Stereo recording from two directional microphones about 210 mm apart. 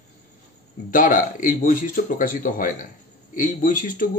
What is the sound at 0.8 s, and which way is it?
Speech, 40° left (ahead or behind).